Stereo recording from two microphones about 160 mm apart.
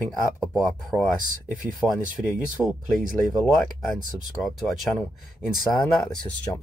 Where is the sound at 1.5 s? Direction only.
55° right (ahead or behind).